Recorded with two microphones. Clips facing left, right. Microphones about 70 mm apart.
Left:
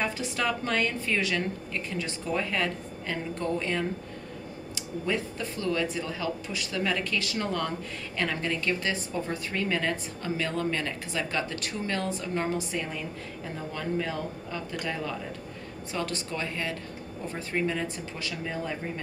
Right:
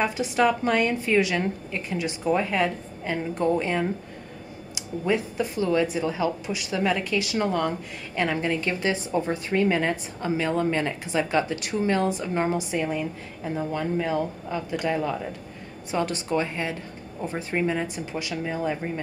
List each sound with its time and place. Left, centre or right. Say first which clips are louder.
0.0 s a woman's voice: right 7 dB; centre